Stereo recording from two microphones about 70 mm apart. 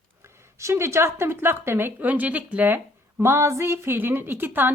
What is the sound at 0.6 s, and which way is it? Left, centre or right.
A woman's voice, right.